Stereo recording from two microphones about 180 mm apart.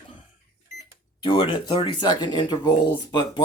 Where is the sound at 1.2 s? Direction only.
30° left (ahead or behind).